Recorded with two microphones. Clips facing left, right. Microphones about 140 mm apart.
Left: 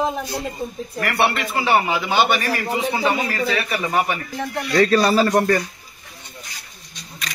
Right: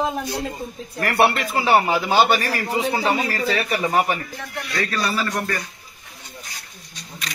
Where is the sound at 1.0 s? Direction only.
40° right (ahead or behind).